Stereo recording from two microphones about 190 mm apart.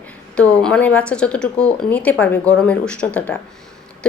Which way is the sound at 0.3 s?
5° left (ahead or behind).